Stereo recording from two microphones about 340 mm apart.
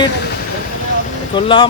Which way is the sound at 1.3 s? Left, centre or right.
Centre.